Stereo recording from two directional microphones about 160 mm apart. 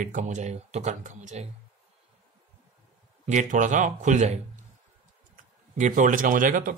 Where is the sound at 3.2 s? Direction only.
50° right (ahead or behind).